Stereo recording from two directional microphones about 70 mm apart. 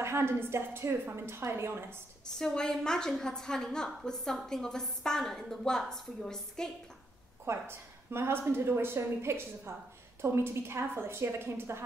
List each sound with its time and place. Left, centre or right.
0.0 s a woman's voice: right
2.3 s a woman's voice: centre
7.4 s a woman's voice: right